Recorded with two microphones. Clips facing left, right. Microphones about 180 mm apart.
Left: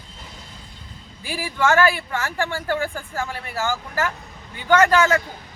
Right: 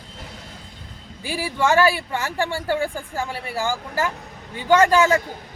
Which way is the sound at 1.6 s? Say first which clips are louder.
Even; 15° right (ahead or behind).